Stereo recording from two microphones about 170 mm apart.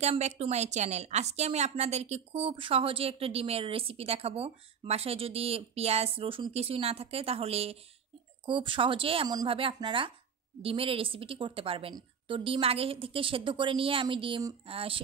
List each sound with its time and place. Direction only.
0.0 s a woman's voice: 40° right (ahead or behind)